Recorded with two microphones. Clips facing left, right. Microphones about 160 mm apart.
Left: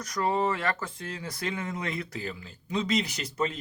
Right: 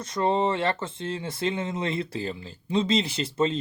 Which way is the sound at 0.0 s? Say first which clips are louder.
Right 3 dB; 25° right (ahead or behind).